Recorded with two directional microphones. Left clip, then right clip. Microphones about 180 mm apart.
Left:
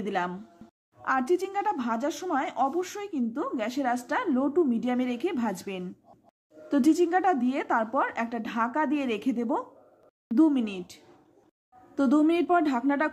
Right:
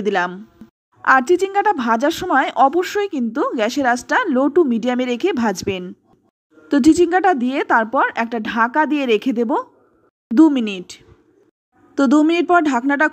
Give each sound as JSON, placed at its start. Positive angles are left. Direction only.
{"t": 0.0, "sound": "a woman's voice", "side_deg": -30}
{"t": 12.0, "sound": "a woman's voice", "side_deg": -30}